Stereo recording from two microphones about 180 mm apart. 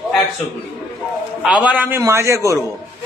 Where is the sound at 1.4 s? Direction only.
5° right (ahead or behind).